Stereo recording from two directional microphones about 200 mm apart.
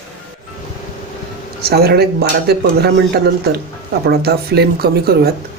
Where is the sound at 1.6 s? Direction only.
50° right (ahead or behind).